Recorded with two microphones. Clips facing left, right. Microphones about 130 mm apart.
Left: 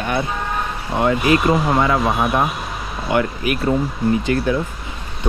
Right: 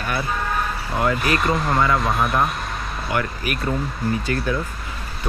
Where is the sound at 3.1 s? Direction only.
20° left (ahead or behind).